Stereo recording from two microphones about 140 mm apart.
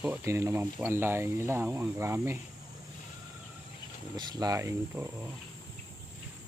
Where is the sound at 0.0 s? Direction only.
15° right (ahead or behind).